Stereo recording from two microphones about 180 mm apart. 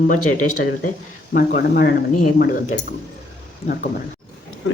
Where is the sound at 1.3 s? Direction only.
55° left (ahead or behind).